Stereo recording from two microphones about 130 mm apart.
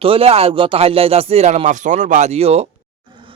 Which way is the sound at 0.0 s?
45° right (ahead or behind).